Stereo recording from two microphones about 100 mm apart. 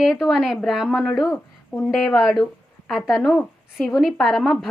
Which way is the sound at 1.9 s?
Centre (ahead or behind).